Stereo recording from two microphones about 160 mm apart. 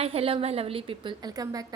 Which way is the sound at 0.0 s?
35° right (ahead or behind).